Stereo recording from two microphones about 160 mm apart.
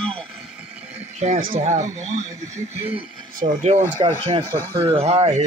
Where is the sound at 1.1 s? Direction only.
45° right (ahead or behind).